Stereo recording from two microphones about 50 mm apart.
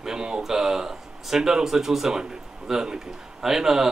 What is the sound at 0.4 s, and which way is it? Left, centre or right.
Speech, centre.